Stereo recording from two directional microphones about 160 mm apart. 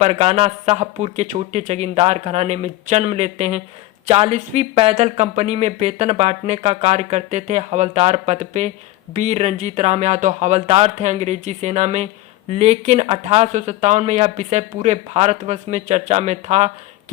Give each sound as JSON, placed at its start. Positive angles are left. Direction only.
{"t": 0.0, "sound": "speech", "side_deg": -40}